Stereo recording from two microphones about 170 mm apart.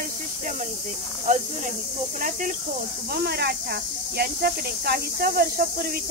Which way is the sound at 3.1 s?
70° right (ahead or behind).